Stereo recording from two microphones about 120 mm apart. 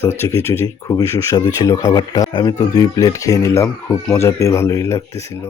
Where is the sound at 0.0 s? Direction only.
20° left (ahead or behind).